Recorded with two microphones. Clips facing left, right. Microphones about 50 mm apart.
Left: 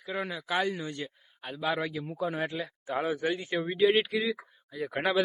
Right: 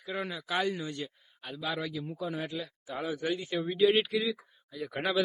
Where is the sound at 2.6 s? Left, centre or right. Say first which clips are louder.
Left 2 dB; left.